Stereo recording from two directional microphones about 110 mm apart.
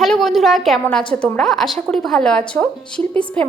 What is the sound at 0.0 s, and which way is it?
A woman's voice, centre (ahead or behind).